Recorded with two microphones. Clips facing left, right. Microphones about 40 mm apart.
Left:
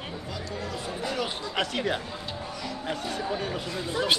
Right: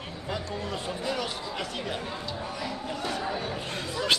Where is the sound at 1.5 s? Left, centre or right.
Left.